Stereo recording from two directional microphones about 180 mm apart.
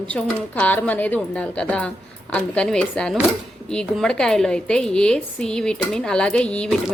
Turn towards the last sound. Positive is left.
turn(degrees=5)  # may be behind; listen again after turning